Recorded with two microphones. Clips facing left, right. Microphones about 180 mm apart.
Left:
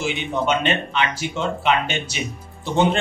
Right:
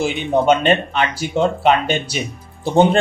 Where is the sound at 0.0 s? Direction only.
45° right (ahead or behind).